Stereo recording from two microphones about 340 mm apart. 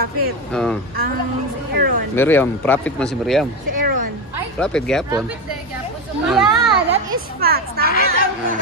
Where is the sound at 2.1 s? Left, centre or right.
Centre.